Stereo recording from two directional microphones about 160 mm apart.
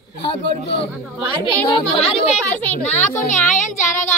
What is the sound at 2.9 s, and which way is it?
A woman's voice, 50° left (ahead or behind).